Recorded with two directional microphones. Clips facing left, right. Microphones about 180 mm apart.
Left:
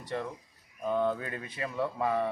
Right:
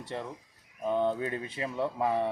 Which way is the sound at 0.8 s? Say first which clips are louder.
Right 1 dB; 25° right (ahead or behind).